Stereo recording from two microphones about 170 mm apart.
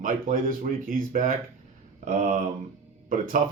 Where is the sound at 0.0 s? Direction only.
55° right (ahead or behind).